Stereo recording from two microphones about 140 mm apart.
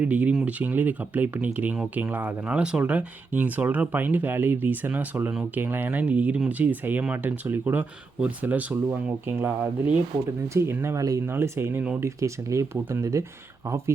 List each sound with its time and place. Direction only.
0.0 s speech: 10° right (ahead or behind)